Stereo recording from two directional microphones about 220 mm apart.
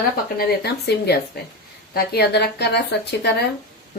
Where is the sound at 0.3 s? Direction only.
45° left (ahead or behind).